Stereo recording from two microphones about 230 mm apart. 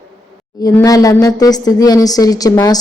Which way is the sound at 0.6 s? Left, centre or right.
Centre.